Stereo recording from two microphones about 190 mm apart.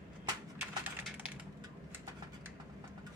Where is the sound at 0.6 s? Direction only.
5° right (ahead or behind).